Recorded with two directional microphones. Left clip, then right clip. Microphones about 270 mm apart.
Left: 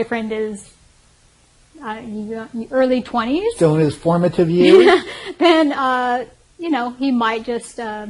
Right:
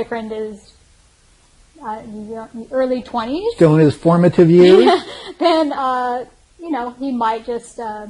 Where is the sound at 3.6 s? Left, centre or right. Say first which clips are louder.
Right 6 dB; right.